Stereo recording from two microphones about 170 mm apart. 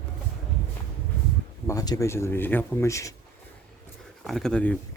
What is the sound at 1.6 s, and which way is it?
Speech, 20° left (ahead or behind).